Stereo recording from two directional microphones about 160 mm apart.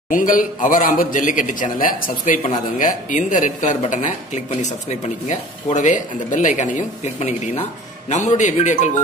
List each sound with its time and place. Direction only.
0.1 s a man's voice: 60° left (ahead or behind)